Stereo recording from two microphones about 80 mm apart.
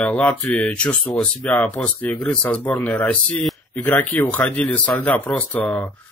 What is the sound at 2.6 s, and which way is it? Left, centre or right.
Speech, left.